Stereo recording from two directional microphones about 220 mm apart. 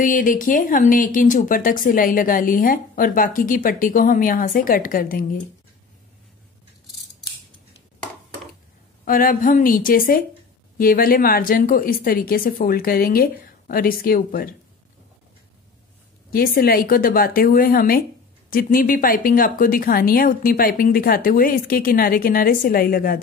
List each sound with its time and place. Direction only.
0.0 s a woman's voice: 35° left (ahead or behind)
9.0 s a woman's voice: 40° left (ahead or behind)
16.3 s a woman's voice: 40° left (ahead or behind)